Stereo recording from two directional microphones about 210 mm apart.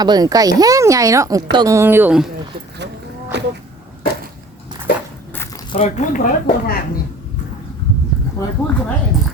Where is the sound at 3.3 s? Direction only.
55° right (ahead or behind).